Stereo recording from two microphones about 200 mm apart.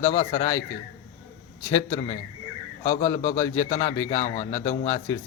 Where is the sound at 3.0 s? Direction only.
15° left (ahead or behind).